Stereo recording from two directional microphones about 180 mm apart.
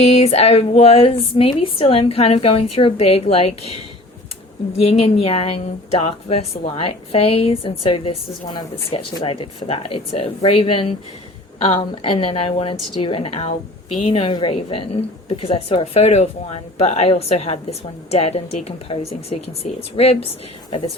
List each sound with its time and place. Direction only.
0.0 s speech: 35° left (ahead or behind)
4.8 s speech: 35° left (ahead or behind)